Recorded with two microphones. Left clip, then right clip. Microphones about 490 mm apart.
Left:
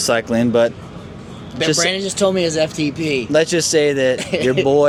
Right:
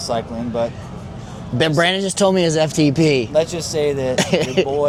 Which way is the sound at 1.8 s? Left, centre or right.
Right.